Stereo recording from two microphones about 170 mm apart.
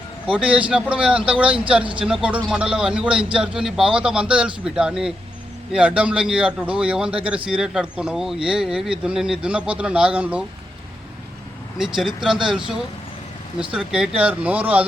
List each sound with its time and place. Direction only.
0.3 s a man's voice: 5° right (ahead or behind)
11.8 s a man's voice: centre (ahead or behind)